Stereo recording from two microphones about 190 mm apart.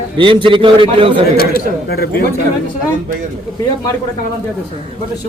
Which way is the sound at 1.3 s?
55° left (ahead or behind).